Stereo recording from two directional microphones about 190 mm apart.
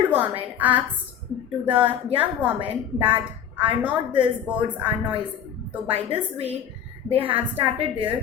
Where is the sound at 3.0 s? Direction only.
10° right (ahead or behind).